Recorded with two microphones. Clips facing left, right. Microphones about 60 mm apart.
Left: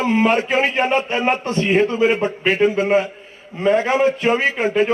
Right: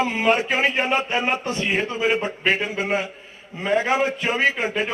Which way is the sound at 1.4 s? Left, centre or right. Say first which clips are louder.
Left 7 dB; left.